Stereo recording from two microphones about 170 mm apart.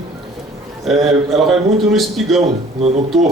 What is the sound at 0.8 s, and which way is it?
A man's voice, centre (ahead or behind).